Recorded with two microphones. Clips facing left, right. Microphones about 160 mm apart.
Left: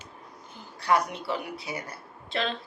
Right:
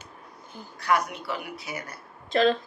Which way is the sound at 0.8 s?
30° left (ahead or behind).